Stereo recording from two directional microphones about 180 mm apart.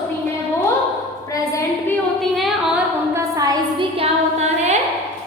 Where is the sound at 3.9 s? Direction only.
40° right (ahead or behind).